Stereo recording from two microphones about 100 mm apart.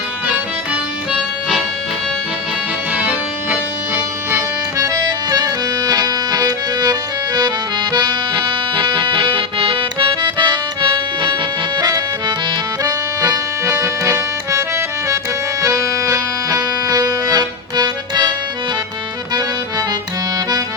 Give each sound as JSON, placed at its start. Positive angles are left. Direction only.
{"t": 2.9, "sound": "music", "side_deg": -15}
{"t": 4.8, "sound": "accordion", "side_deg": -35}
{"t": 11.8, "sound": "accordion", "side_deg": -40}